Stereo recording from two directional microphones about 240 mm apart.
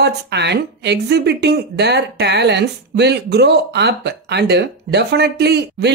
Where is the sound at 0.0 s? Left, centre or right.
Right.